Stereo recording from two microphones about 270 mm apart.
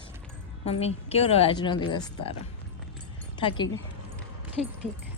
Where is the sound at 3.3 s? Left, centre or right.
Centre.